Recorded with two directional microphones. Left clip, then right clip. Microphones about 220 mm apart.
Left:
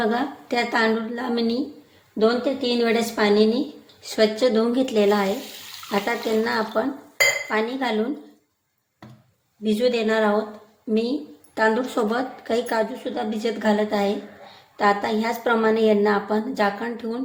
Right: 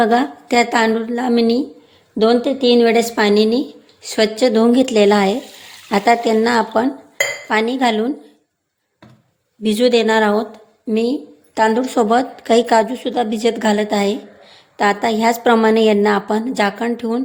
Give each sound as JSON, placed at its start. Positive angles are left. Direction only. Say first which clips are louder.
{"t": 0.0, "sound": "a woman's voice", "louder": "right 9 dB", "side_deg": -35}
{"t": 9.6, "sound": "a woman's voice", "louder": "right 7 dB", "side_deg": -45}
{"t": 10.8, "sound": "a woman's voice", "louder": "right 5 dB", "side_deg": -35}